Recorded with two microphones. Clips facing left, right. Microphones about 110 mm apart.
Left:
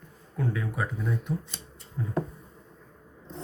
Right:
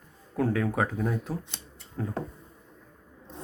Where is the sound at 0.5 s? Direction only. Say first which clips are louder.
Right 5 dB; 65° right (ahead or behind).